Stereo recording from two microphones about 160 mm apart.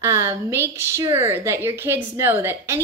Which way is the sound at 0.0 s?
15° right (ahead or behind).